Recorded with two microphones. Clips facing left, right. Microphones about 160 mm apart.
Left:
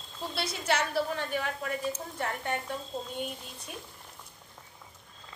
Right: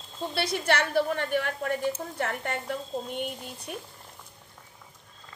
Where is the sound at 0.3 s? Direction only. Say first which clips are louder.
Right 4 dB; 65° right (ahead or behind).